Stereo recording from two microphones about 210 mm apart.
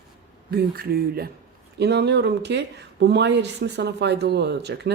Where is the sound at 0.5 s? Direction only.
45° right (ahead or behind).